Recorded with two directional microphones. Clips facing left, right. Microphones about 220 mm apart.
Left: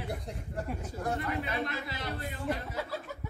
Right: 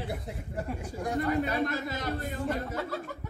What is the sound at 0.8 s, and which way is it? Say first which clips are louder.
Speech: right 1 dB; 15° right (ahead or behind).